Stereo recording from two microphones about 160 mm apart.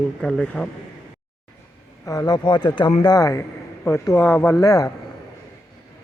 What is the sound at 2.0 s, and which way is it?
A man's voice, 25° left (ahead or behind).